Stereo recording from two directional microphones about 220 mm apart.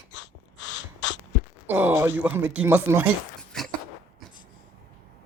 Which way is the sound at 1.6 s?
10° right (ahead or behind).